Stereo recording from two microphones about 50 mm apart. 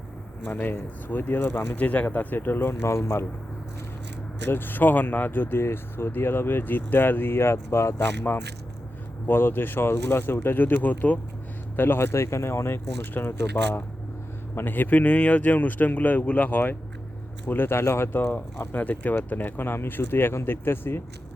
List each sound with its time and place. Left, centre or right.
0.4 s speech: left
1.7 s speech: left
4.4 s speech: left
9.2 s speech: left
11.8 s speech: left
12.1 s speech: left
14.5 s speech: left
17.5 s speech: left